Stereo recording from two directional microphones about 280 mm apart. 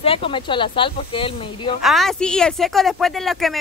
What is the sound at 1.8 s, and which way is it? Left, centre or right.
Speech, centre.